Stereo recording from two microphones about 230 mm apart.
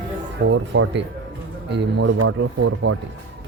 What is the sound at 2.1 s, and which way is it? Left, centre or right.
Speech, right.